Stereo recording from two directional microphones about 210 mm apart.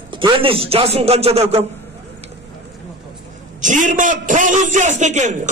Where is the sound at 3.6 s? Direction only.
35° right (ahead or behind).